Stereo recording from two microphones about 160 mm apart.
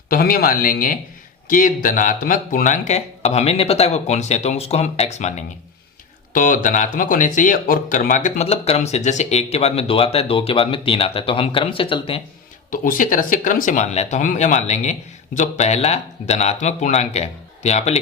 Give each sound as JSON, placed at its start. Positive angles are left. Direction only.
{"t": 0.1, "sound": "speech", "side_deg": 65}
{"t": 6.3, "sound": "speech", "side_deg": 55}
{"t": 12.7, "sound": "speech", "side_deg": 60}